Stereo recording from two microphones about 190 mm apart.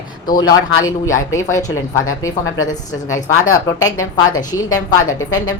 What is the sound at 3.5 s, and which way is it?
A woman's voice, 15° left (ahead or behind).